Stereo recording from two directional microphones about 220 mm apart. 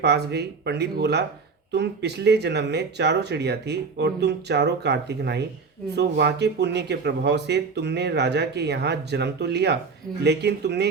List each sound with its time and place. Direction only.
0.0 s speech: 50° right (ahead or behind)